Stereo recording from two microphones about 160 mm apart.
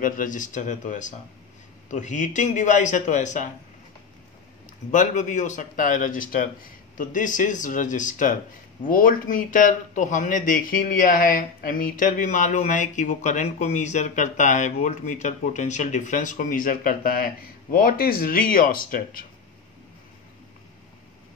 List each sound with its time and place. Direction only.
0.0 s a man's voice: 55° left (ahead or behind)
4.9 s a man's voice: 50° left (ahead or behind)